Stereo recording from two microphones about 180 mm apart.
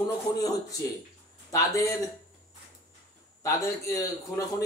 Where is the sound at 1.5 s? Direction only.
20° left (ahead or behind).